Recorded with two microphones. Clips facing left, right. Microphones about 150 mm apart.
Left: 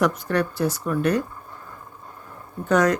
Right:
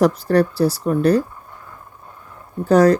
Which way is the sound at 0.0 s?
35° right (ahead or behind).